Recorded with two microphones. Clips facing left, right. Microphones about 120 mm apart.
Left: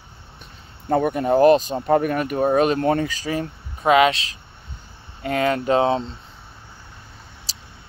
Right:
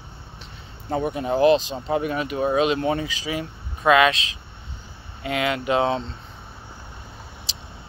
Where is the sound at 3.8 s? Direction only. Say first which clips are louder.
Left 1 dB; 25° left (ahead or behind).